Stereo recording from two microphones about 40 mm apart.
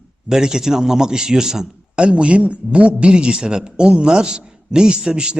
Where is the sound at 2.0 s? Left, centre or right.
Right.